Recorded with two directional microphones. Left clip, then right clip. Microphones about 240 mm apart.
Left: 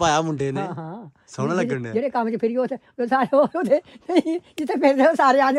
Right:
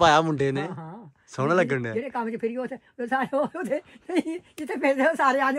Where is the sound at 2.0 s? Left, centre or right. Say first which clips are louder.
Left 7 dB; left.